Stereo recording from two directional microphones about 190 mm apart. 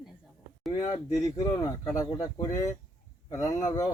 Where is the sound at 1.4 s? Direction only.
20° left (ahead or behind).